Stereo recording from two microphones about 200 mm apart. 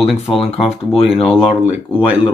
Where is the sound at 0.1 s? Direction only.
Centre (ahead or behind).